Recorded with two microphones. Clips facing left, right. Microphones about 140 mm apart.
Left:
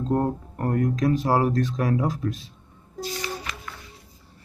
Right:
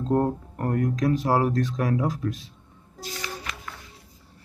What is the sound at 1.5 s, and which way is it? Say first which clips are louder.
Speech: left 1 dB; 20° left (ahead or behind).